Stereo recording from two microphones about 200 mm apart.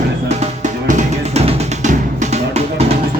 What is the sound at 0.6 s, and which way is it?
Music, 35° right (ahead or behind).